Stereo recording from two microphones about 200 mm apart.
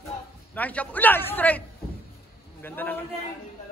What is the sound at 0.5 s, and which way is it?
A man's voice, 5° left (ahead or behind).